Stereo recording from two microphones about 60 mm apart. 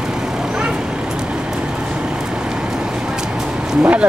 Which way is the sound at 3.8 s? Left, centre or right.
Right.